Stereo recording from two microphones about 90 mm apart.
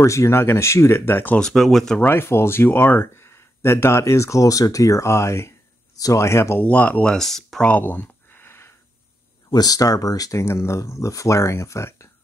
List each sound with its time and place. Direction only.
0.0 s speech: 35° left (ahead or behind)
1.4 s speech: centre (ahead or behind)
2.0 s speech: 25° left (ahead or behind)
6.6 s speech: 15° left (ahead or behind)
7.6 s a sound: 20° left (ahead or behind)
9.5 s speech: 45° left (ahead or behind)